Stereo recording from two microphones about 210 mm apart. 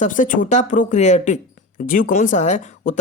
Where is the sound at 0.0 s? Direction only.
40° left (ahead or behind).